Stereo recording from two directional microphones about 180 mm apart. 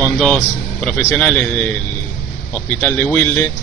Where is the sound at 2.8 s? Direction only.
10° left (ahead or behind).